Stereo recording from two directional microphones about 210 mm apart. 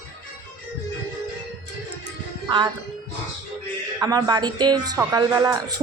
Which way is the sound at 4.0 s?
20° right (ahead or behind).